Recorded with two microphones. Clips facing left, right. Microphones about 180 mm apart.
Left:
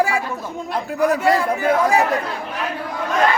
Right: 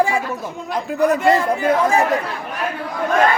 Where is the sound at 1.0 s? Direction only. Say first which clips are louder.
Right 2 dB; 5° left (ahead or behind).